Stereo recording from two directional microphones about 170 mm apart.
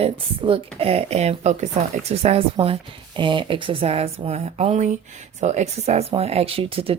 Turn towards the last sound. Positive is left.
turn(degrees=-35)  # may be behind; listen again after turning